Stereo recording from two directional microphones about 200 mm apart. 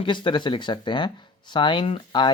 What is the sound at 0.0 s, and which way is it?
Speech, 25° left (ahead or behind).